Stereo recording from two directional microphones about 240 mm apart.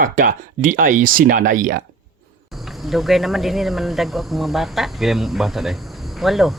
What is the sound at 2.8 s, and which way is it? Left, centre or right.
Speech, centre.